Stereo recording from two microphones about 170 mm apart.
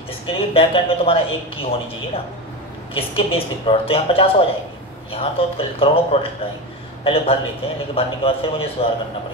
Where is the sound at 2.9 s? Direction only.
35° left (ahead or behind).